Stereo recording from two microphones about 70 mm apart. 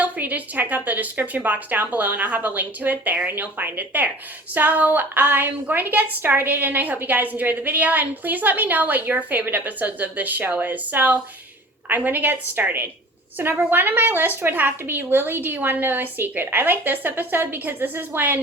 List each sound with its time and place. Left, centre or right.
0.0 s a woman's voice: right